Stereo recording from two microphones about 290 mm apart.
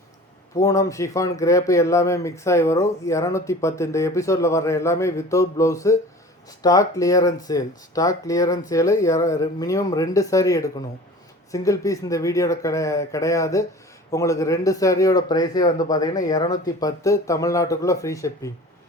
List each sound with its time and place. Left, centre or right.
0.5 s speech: centre